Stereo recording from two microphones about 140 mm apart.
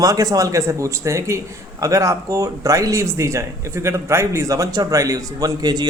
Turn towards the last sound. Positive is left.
turn(degrees=-30)  # may be behind; listen again after turning